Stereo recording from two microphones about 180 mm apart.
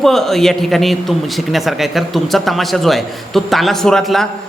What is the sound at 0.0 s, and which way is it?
A man's voice, centre (ahead or behind).